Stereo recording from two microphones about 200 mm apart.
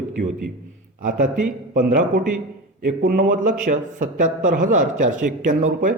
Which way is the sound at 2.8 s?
40° right (ahead or behind).